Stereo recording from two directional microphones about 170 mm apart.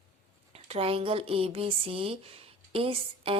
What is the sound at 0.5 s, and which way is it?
Speech, 35° right (ahead or behind).